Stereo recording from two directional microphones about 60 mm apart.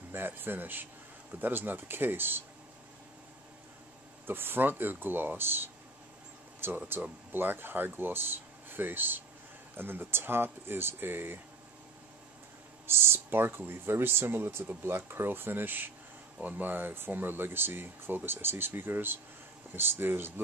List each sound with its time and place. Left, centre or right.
0.1 s speech: right
4.3 s speech: right
6.9 s speech: right
12.8 s speech: right